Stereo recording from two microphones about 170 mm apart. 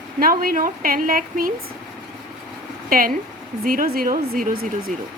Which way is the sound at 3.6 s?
60° right (ahead or behind).